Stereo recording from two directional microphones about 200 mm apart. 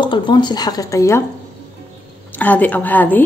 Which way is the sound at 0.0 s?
20° left (ahead or behind).